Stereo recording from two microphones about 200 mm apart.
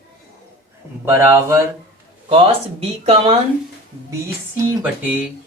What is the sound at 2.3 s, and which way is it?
Speech, 30° right (ahead or behind).